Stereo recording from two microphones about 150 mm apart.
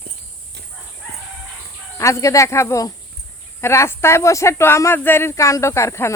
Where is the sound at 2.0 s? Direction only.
20° left (ahead or behind).